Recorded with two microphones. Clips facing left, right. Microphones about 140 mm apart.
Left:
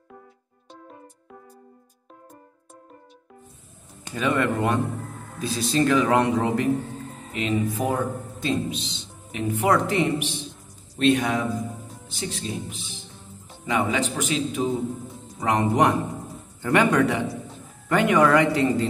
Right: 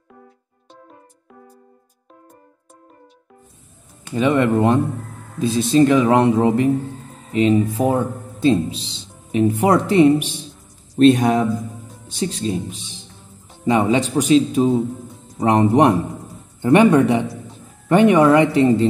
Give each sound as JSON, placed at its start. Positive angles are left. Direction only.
{"t": 4.1, "sound": "a man's voice", "side_deg": -20}